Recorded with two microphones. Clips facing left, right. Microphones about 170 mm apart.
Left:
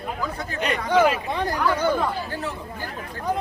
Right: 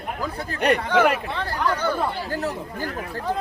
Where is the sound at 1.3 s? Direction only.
15° left (ahead or behind).